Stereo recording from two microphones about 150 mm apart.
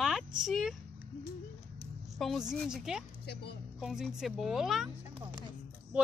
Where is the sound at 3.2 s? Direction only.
90° left.